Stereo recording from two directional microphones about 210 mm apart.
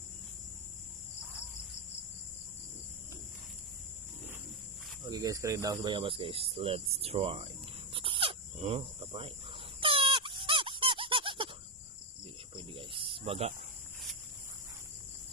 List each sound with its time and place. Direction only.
5.0 s speech: 15° right (ahead or behind)
7.9 s a sound: 25° right (ahead or behind)
9.8 s squeak: 25° right (ahead or behind)
12.5 s cricket: 25° right (ahead or behind)